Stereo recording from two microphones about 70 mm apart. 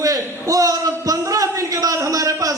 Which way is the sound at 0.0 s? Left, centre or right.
Right.